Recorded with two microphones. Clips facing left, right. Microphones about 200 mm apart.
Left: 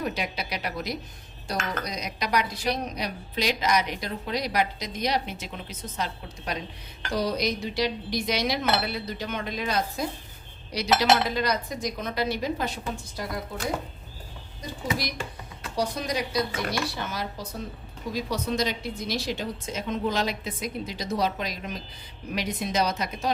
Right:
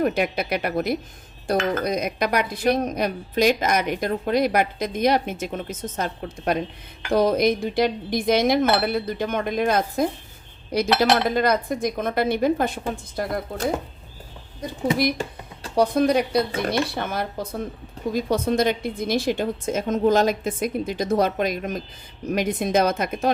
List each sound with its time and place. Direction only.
0.0 s speech: 55° right (ahead or behind)
14.9 s speech: 55° right (ahead or behind)